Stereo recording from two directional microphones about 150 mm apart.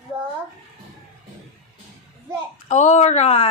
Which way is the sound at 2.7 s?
50° left (ahead or behind).